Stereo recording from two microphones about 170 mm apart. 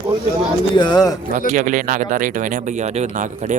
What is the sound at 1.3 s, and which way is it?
Speech, 50° right (ahead or behind).